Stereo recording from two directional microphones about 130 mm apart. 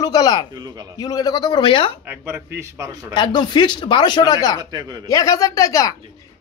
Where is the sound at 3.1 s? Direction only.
35° left (ahead or behind).